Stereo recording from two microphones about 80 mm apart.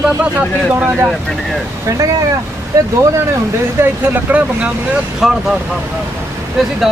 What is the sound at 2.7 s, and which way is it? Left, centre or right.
Speech, right.